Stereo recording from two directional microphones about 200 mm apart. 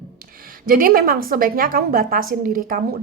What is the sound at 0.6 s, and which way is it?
A woman's voice, 45° right (ahead or behind).